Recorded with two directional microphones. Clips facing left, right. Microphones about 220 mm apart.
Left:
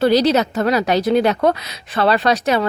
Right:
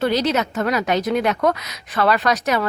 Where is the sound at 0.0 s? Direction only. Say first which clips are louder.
Left 5 dB; 35° left (ahead or behind).